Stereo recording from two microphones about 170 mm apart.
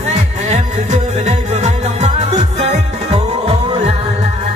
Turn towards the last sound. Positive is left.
turn(degrees=-35)  # may be behind; listen again after turning